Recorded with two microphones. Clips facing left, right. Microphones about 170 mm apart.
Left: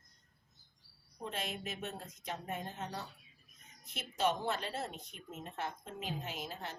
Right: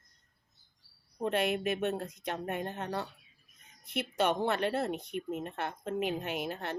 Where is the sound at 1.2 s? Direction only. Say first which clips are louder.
Right 11 dB; 65° right (ahead or behind).